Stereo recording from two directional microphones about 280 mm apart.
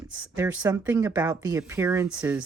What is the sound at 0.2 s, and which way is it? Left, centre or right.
Speech, centre.